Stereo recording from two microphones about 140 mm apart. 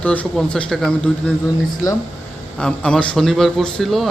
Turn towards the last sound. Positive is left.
turn(degrees=0)  # may be behind; listen again after turning